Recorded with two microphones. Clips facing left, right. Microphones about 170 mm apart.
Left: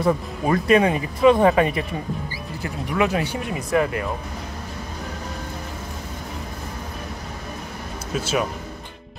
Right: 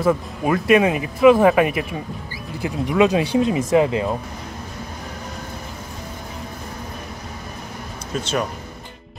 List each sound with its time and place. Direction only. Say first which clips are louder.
0.0 s speech: right 2 dB; 5° right (ahead or behind)
2.6 s speech: right 5 dB; 20° right (ahead or behind)
8.1 s speech: even; 5° left (ahead or behind)